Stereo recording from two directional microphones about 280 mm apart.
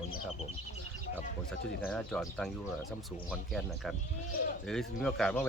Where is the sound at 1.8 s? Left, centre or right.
Centre.